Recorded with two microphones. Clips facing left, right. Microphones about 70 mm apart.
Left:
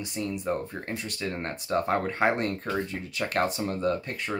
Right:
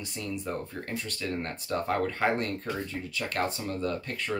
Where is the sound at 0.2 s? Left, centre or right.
Left.